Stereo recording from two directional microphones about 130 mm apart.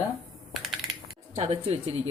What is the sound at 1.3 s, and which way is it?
Speech, 55° right (ahead or behind).